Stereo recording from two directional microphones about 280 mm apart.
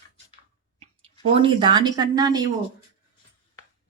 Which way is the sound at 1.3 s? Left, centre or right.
Centre.